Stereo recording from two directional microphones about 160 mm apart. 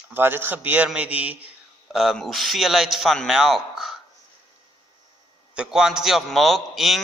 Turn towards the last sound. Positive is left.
turn(degrees=0)  # may be behind; listen again after turning